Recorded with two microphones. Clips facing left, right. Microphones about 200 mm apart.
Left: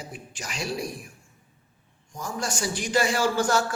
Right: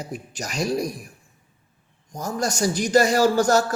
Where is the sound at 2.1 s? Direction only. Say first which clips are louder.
Right 5 dB; 40° right (ahead or behind).